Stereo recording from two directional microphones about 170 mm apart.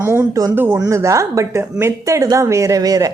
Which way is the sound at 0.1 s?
15° right (ahead or behind).